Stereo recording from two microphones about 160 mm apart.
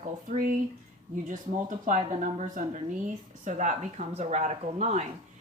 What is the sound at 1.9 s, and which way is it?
Speech, 50° right (ahead or behind).